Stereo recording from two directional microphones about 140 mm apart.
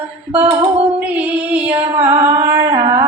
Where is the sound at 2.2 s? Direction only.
20° right (ahead or behind).